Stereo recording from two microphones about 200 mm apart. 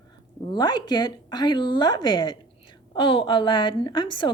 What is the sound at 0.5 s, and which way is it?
A woman's voice, 20° left (ahead or behind).